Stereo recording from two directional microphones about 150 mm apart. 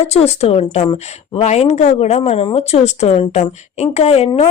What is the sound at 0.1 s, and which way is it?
A woman's voice, 45° left (ahead or behind).